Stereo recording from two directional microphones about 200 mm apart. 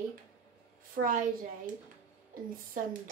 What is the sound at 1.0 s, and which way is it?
Speech, 50° right (ahead or behind).